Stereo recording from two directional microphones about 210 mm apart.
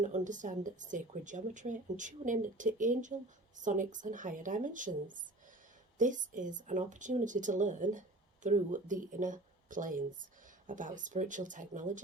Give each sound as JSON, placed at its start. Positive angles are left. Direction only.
{"t": 0.0, "sound": "a woman's voice", "side_deg": -35}